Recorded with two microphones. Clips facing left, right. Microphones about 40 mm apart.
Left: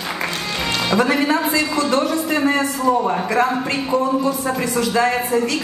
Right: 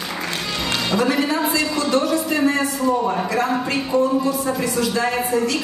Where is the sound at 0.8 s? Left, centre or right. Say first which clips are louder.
Left 3 dB; left.